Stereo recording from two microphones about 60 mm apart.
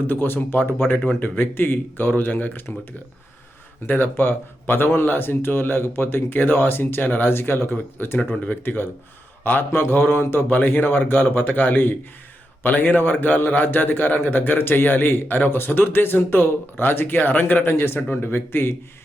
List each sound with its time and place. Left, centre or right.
0.1 s a man's voice: left
3.8 s a man's voice: left